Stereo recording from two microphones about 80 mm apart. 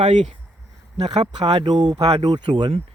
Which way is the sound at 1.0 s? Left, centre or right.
Right.